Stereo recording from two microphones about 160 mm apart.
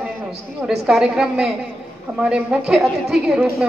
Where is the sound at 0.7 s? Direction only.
5° right (ahead or behind).